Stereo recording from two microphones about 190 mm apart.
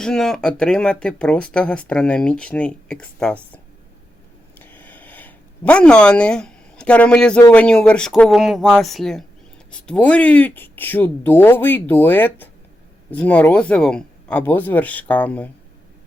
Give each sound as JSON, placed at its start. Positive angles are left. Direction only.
{"t": 0.0, "sound": "speech", "side_deg": 5}
{"t": 4.6, "sound": "a sound", "side_deg": 10}
{"t": 7.5, "sound": "speech", "side_deg": 5}